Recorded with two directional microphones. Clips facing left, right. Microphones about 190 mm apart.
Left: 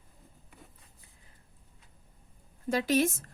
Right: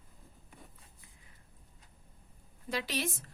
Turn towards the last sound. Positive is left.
turn(degrees=45)  # may be behind; listen again after turning